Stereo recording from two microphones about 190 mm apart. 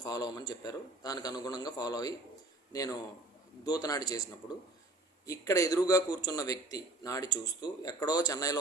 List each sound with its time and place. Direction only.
0.0 s a man's voice: 20° left (ahead or behind)